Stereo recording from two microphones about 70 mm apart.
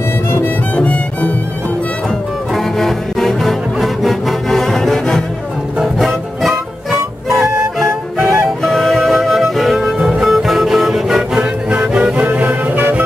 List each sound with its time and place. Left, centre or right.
0.7 s music: centre
2.5 s music: centre; by 13.0 s right